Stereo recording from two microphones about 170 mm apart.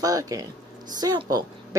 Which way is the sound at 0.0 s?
20° right (ahead or behind).